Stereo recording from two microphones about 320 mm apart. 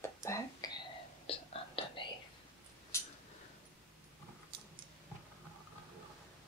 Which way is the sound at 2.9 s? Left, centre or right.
Centre.